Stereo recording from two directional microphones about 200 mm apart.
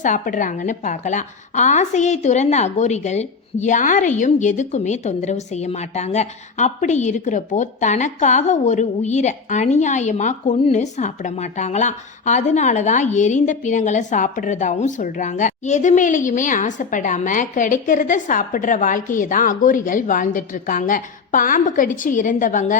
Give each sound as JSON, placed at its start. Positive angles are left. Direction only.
{"t": 0.0, "sound": "a woman's voice", "side_deg": 40}